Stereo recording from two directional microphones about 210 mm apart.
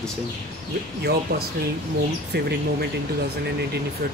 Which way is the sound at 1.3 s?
50° right (ahead or behind).